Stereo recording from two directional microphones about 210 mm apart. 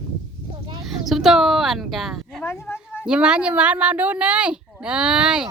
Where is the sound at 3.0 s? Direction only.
5° right (ahead or behind).